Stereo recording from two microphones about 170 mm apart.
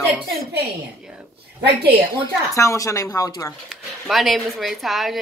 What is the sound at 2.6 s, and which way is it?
Speech, 20° left (ahead or behind).